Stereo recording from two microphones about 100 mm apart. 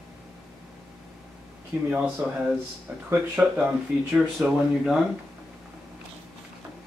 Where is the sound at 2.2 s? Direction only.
20° right (ahead or behind).